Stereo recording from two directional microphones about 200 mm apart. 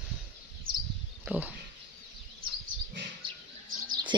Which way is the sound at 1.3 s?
10° right (ahead or behind).